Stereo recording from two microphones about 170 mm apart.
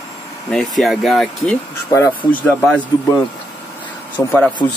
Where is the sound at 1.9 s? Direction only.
20° left (ahead or behind).